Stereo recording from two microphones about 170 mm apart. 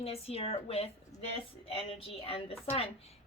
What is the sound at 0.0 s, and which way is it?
Speech, 35° left (ahead or behind).